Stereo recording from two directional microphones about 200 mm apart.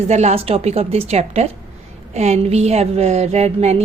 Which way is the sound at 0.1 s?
35° right (ahead or behind).